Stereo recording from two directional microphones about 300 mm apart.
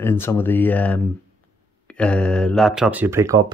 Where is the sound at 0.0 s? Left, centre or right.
Centre.